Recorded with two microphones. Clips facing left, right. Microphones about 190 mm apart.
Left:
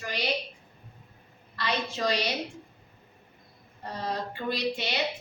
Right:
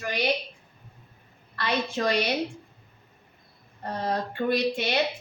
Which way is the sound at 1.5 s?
55° right (ahead or behind).